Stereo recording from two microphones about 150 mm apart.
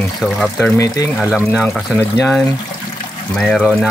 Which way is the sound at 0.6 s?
20° left (ahead or behind).